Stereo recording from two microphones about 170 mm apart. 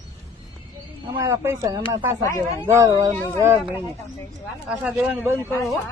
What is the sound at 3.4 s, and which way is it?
Speech, 15° right (ahead or behind).